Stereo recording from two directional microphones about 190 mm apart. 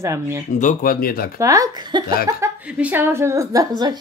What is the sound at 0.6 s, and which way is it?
Speech, 45° left (ahead or behind).